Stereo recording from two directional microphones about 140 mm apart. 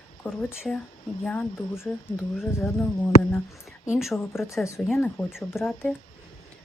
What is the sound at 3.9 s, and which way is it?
Speech, centre (ahead or behind).